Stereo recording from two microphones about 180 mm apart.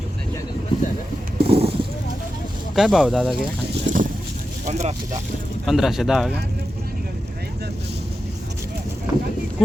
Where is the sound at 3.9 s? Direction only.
45° right (ahead or behind).